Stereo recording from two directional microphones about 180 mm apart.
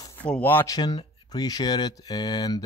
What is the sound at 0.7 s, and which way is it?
Speech, 20° left (ahead or behind).